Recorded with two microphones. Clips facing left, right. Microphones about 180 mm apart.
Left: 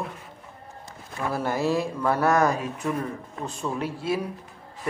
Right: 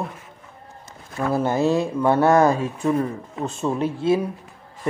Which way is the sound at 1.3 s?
20° right (ahead or behind).